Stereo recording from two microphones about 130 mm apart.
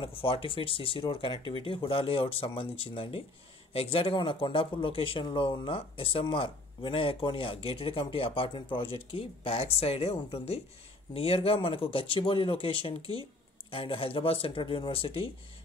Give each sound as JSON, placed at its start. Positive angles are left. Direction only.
{"t": 0.0, "sound": "speech", "side_deg": 45}